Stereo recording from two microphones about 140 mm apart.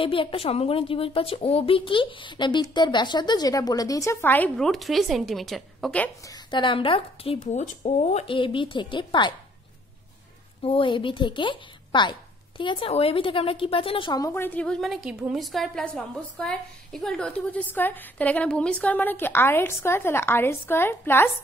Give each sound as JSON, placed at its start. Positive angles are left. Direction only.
{"t": 0.0, "sound": "a woman's voice", "side_deg": 40}
{"t": 4.6, "sound": "a woman's voice", "side_deg": 0}
{"t": 6.2, "sound": "a woman's voice", "side_deg": 30}
{"t": 7.5, "sound": "a woman's voice", "side_deg": 55}
{"t": 10.6, "sound": "a woman's voice", "side_deg": 40}
{"t": 14.2, "sound": "a woman's voice", "side_deg": 15}